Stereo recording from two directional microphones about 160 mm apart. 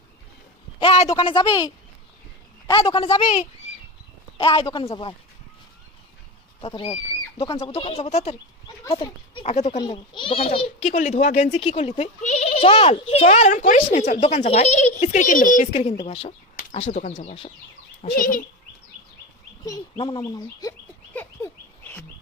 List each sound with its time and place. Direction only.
0.8 s speech: 35° left (ahead or behind)
4.4 s speech: 30° left (ahead or behind)
6.6 s speech: 30° left (ahead or behind)
7.4 s speech: 25° left (ahead or behind)
7.7 s speech: 35° left (ahead or behind)
10.9 s speech: 50° left (ahead or behind)
11.6 s speech: 35° left (ahead or behind); by 14.2 s 50° left (ahead or behind)
14.2 s speech: 40° left (ahead or behind)
16.9 s speech: 60° left (ahead or behind)
20.0 s speech: 30° left (ahead or behind)
21.1 s fowl: 10° left (ahead or behind)